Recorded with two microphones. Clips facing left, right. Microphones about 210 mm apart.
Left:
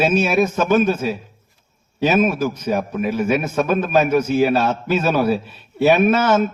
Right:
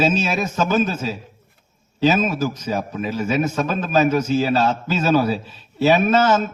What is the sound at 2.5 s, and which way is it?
A man's voice, 60° left (ahead or behind).